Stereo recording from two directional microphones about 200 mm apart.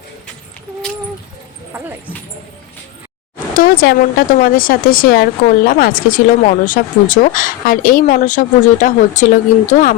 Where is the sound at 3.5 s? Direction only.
45° left (ahead or behind).